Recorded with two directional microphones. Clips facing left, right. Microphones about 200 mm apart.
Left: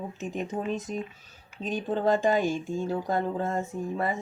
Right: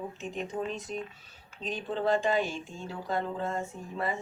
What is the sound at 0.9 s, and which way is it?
Speech, 45° left (ahead or behind).